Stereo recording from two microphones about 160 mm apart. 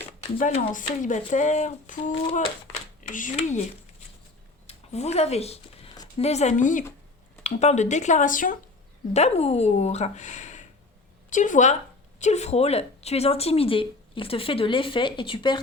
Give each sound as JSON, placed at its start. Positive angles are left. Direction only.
{"t": 0.3, "sound": "speech", "side_deg": 55}
{"t": 4.6, "sound": "speech", "side_deg": 40}
{"t": 9.1, "sound": "speech", "side_deg": 40}